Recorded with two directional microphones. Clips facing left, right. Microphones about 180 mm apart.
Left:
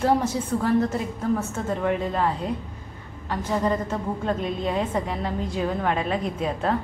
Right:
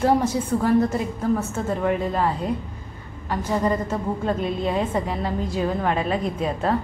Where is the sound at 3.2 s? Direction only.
10° right (ahead or behind).